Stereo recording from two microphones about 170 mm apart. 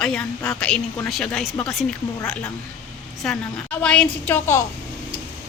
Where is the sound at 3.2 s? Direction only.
5° left (ahead or behind).